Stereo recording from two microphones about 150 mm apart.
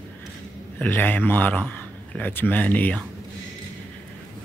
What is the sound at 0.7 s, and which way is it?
Speech, 10° left (ahead or behind).